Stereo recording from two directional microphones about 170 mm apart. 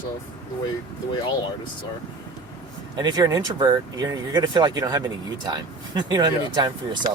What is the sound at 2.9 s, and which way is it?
Speech, 25° right (ahead or behind).